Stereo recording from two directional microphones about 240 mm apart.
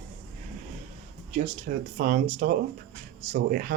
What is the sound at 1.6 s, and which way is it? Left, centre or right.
Speech, right.